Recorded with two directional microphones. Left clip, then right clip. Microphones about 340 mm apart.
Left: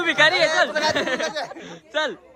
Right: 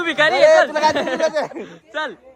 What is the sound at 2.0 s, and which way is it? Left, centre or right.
Speech, centre.